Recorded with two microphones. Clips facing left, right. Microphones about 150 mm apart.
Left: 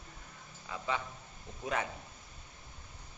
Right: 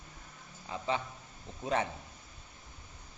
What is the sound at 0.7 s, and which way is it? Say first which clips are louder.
A man's voice: right 2 dB; 30° right (ahead or behind).